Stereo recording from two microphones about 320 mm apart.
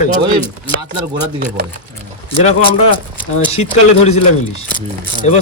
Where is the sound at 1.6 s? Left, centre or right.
Right.